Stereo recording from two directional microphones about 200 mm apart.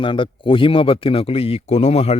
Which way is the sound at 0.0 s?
25° left (ahead or behind).